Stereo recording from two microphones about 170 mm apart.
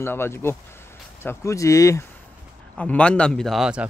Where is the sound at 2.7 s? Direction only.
5° left (ahead or behind).